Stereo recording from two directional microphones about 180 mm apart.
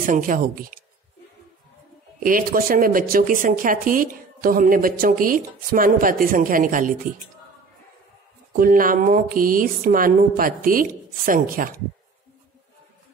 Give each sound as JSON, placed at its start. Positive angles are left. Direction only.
{"t": 0.0, "sound": "speech", "side_deg": -50}
{"t": 2.1, "sound": "speech", "side_deg": -50}
{"t": 8.5, "sound": "speech", "side_deg": -50}